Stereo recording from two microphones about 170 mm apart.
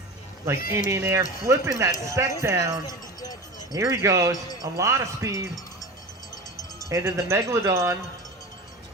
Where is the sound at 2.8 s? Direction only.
20° left (ahead or behind).